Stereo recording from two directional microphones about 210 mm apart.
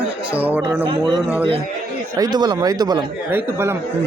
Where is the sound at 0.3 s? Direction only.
5° right (ahead or behind).